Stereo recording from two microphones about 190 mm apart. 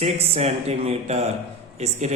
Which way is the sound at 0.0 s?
35° right (ahead or behind).